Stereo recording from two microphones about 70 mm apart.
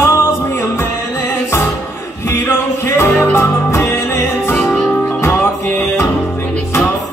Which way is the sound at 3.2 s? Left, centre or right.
Left.